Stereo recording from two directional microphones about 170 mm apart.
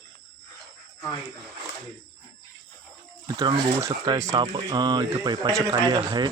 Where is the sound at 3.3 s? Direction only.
25° right (ahead or behind).